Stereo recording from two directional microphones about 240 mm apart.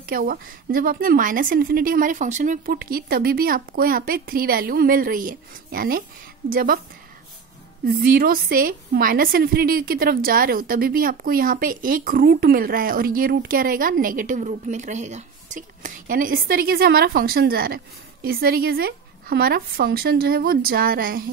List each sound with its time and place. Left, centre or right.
0.0 s a woman's voice: right
7.8 s a woman's voice: right